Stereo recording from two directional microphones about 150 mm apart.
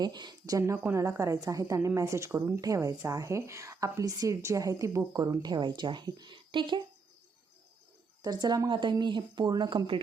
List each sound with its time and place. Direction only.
0.0 s a woman's voice: 30° right (ahead or behind)
8.2 s a woman's voice: 25° right (ahead or behind)